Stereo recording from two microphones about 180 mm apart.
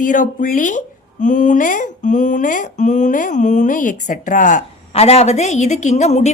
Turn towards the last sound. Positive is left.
turn(degrees=40)  # may be behind; listen again after turning